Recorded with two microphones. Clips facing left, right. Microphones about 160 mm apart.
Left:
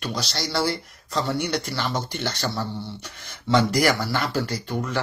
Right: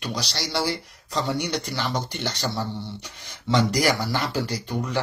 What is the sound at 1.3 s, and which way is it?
Speech, 15° right (ahead or behind).